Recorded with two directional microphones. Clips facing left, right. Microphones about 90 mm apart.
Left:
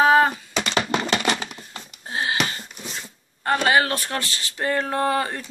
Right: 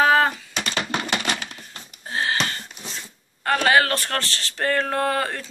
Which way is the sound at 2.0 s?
20° left (ahead or behind).